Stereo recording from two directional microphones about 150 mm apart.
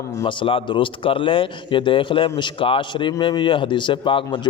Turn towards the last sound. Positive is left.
turn(degrees=35)  # may be behind; listen again after turning